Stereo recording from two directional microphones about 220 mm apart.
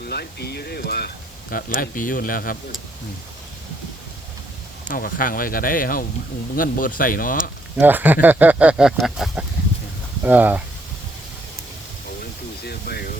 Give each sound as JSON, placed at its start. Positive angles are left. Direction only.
{"t": 0.0, "sound": "speech", "side_deg": 45}
{"t": 4.9, "sound": "speech", "side_deg": 40}
{"t": 7.8, "sound": "speech", "side_deg": -10}
{"t": 12.2, "sound": "a sound", "side_deg": 45}